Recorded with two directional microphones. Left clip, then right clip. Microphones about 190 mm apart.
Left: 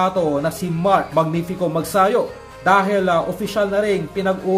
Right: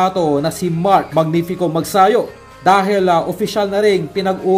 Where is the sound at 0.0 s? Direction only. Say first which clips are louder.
Right 3 dB; 20° right (ahead or behind).